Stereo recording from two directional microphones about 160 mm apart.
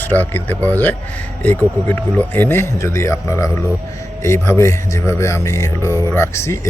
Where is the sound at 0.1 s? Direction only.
10° left (ahead or behind).